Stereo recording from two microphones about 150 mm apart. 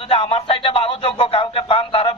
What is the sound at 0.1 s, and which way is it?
Speech, 40° left (ahead or behind).